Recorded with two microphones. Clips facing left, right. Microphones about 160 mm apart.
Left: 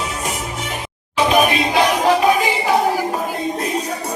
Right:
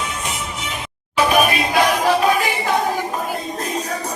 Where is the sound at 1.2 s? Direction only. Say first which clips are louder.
Left 1 dB; 20° left (ahead or behind).